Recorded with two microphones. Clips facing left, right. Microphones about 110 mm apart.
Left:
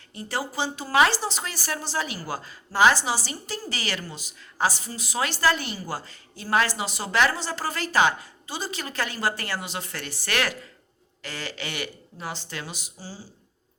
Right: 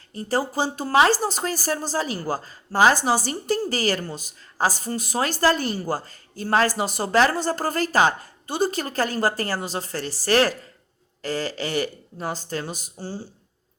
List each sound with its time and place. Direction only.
0.1 s a woman's voice: 40° right (ahead or behind); by 13.2 s 60° right (ahead or behind)